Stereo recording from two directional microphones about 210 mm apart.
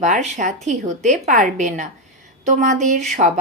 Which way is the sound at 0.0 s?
35° right (ahead or behind).